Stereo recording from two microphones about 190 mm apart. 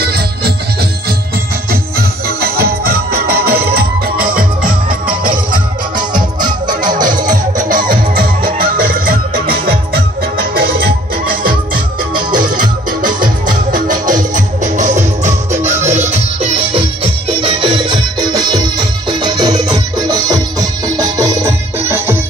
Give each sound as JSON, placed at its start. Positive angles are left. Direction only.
{"t": 0.0, "sound": "music", "side_deg": -55}
{"t": 1.7, "sound": "music", "side_deg": -55}
{"t": 5.9, "sound": "music", "side_deg": -25}
{"t": 7.2, "sound": "music", "side_deg": -45}